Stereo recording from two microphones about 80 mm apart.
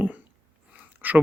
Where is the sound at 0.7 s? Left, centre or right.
Right.